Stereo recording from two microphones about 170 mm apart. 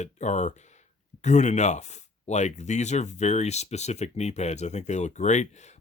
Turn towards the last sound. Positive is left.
turn(degrees=45)  # may be behind; listen again after turning